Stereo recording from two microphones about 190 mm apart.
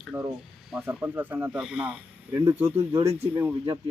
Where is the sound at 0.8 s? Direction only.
10° right (ahead or behind).